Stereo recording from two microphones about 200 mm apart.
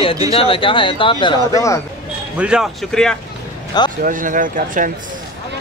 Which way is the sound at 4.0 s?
40° right (ahead or behind).